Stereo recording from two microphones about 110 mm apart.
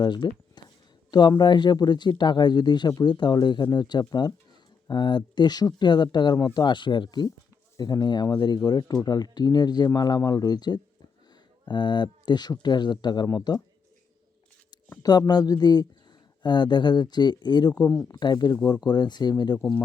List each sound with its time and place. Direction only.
0.0 s speech: 40° left (ahead or behind)
1.4 s speech: 40° left (ahead or behind)
15.3 s speech: 35° left (ahead or behind)